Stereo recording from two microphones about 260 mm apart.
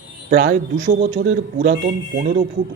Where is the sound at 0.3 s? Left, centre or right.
Right.